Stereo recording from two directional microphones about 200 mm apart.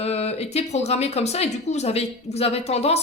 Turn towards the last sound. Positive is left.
turn(degrees=30)  # may be behind; listen again after turning